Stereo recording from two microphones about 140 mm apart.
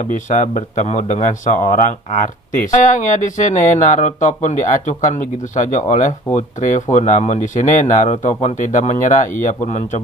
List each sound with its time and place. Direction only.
0.0 s speech: 65° left (ahead or behind)